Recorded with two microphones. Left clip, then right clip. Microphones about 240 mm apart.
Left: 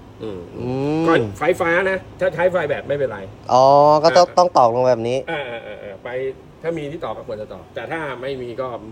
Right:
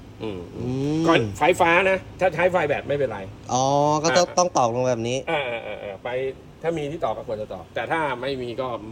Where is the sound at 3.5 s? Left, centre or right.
Centre.